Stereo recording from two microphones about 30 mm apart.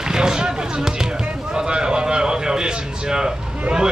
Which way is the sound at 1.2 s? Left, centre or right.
Right.